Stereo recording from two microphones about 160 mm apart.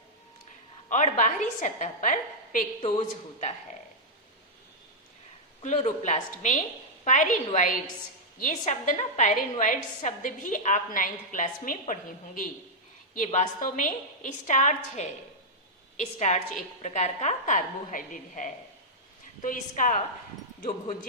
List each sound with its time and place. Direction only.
0.9 s a woman's voice: 50° left (ahead or behind)
2.8 s a woman's voice: 45° left (ahead or behind)
5.6 s a woman's voice: 50° left (ahead or behind)
13.1 s a woman's voice: 45° left (ahead or behind)